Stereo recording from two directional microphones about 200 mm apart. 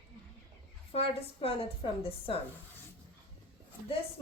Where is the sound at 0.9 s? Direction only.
30° left (ahead or behind).